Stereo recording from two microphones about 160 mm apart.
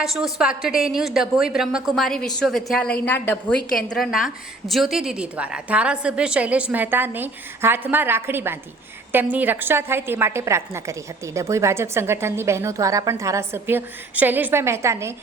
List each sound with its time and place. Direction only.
0.0 s a woman's voice: centre (ahead or behind); by 15.1 s 15° right (ahead or behind)